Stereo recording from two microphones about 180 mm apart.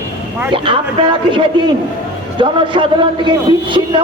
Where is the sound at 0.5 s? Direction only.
30° right (ahead or behind).